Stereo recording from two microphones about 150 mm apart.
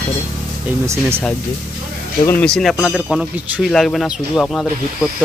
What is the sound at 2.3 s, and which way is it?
Speech, 5° left (ahead or behind).